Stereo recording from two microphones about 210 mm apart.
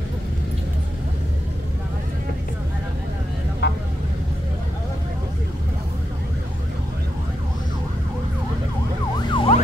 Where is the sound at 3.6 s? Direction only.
55° left (ahead or behind).